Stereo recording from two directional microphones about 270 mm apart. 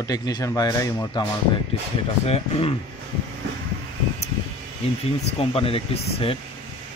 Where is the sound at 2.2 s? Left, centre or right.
Left.